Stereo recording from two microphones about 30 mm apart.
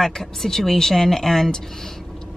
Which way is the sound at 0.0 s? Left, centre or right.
Centre.